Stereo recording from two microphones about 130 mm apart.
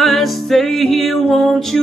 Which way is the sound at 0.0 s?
Centre (ahead or behind).